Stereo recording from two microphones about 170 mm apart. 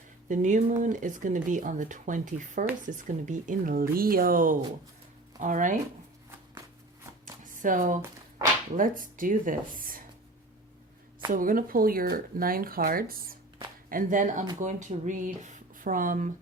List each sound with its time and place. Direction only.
0.3 s speech: 45° right (ahead or behind)
7.4 s a sound: 50° right (ahead or behind)
8.7 s speech: 50° right (ahead or behind)
11.3 s speech: 55° right (ahead or behind)